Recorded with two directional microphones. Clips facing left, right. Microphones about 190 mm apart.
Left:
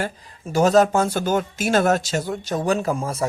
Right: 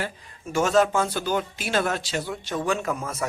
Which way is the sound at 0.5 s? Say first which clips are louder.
Left 4 dB; 40° left (ahead or behind).